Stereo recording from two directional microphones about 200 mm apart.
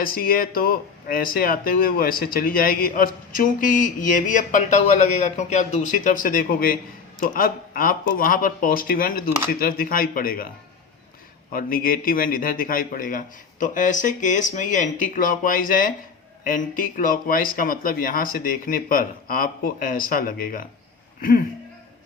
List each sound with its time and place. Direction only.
0.0 s speech: 45° left (ahead or behind)
11.5 s speech: 45° left (ahead or behind)